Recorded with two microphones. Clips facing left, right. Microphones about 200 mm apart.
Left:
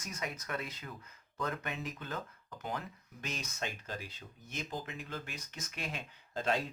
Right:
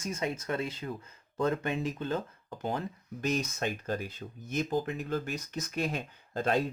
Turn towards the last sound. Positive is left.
turn(degrees=-50)  # may be behind; listen again after turning